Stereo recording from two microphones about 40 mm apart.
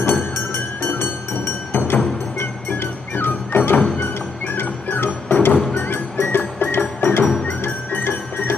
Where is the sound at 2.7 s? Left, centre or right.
Left.